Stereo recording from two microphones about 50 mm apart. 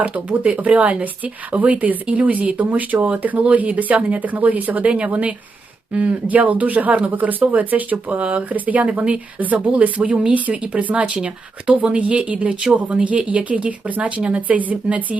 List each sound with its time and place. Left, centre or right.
0.0 s speech: right